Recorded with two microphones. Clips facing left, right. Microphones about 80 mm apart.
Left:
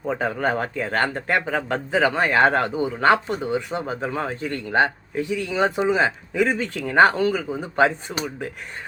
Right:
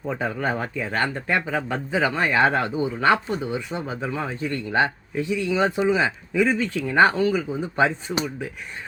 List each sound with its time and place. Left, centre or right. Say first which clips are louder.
0.1 s speech: left 3 dB; left